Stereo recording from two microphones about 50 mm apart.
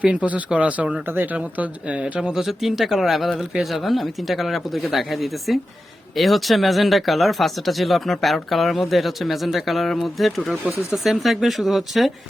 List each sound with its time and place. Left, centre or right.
0.0 s speech: right
1.1 s speech: right
2.3 s speech: centre